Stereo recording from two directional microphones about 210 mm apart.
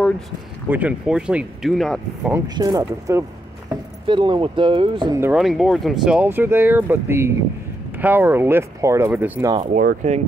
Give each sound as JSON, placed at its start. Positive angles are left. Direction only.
{"t": 0.7, "sound": "speech", "side_deg": -5}
{"t": 2.3, "sound": "speech", "side_deg": -20}
{"t": 5.2, "sound": "speech", "side_deg": -5}
{"t": 9.8, "sound": "speech", "side_deg": -35}